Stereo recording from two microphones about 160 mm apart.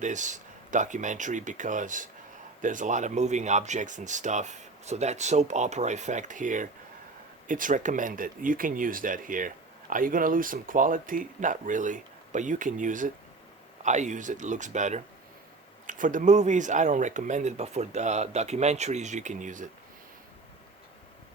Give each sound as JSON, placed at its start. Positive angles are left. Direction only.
{"t": 0.0, "sound": "speech", "side_deg": -50}